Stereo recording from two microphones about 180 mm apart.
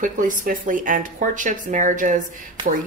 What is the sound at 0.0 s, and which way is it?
Speech, 45° right (ahead or behind).